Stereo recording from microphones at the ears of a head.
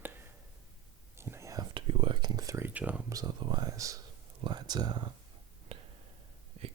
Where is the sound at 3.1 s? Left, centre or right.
Right.